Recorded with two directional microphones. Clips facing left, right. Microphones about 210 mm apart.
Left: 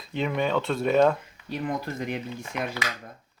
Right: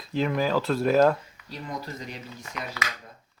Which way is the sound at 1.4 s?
55° left (ahead or behind).